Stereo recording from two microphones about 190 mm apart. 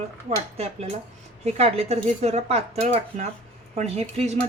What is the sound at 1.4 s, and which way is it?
Speech, 35° right (ahead or behind).